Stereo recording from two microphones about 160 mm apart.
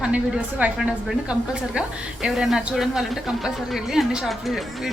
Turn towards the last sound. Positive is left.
turn(degrees=0)  # may be behind; listen again after turning